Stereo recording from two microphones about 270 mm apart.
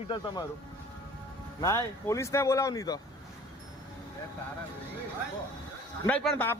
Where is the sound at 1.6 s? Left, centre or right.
Centre.